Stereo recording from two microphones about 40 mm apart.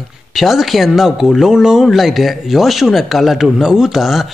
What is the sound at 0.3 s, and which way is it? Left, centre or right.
A man's voice, centre.